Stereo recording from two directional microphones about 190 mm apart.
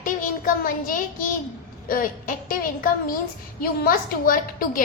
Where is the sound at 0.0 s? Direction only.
45° left (ahead or behind).